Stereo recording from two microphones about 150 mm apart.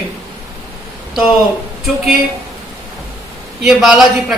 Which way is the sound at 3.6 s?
5° right (ahead or behind).